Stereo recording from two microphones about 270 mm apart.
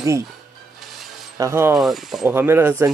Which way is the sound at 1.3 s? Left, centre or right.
Centre.